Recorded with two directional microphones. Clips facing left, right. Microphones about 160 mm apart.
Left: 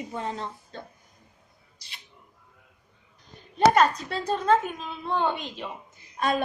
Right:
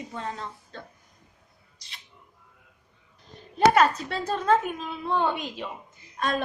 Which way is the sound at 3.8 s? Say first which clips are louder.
Even; 5° right (ahead or behind).